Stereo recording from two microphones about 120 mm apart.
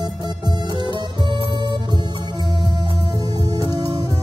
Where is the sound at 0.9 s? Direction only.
45° right (ahead or behind).